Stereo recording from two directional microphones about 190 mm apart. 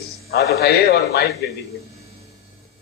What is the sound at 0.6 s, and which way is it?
Speech, 55° left (ahead or behind).